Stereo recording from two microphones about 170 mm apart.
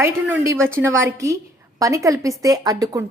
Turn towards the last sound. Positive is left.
turn(degrees=-20)  # may be behind; listen again after turning